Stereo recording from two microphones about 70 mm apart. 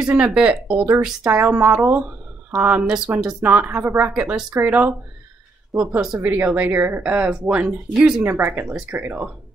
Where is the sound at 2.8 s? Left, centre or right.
Centre.